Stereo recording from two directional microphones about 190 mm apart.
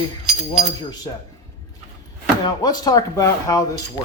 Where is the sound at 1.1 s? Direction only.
20° left (ahead or behind).